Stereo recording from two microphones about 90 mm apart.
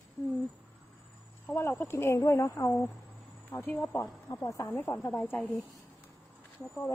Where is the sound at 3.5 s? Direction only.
30° left (ahead or behind).